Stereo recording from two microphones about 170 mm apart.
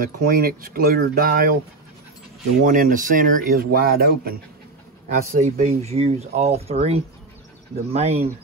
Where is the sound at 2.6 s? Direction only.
50° right (ahead or behind).